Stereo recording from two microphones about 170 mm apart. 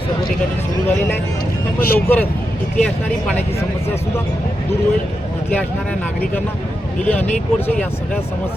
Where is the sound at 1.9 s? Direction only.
10° left (ahead or behind).